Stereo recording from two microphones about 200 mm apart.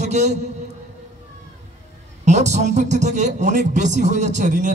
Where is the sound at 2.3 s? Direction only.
35° right (ahead or behind).